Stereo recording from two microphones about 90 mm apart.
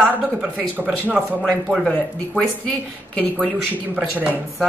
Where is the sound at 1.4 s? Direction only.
10° left (ahead or behind).